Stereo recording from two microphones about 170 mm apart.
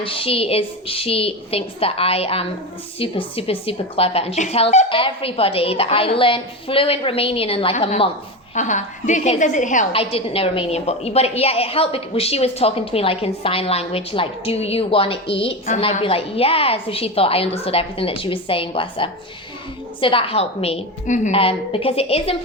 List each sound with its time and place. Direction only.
0.0 s a woman's voice: 30° left (ahead or behind)
8.5 s a woman's voice: 45° left (ahead or behind)
9.9 s a woman's voice: 35° left (ahead or behind)